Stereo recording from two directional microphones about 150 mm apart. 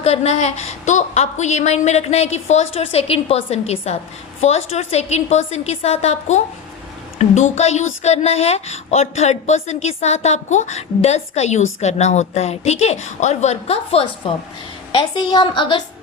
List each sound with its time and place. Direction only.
0.0 s a woman's voice: 45° left (ahead or behind)
14.9 s a woman's voice: 30° left (ahead or behind)